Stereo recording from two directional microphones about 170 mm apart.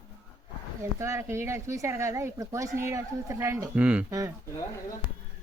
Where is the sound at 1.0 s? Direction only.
15° right (ahead or behind).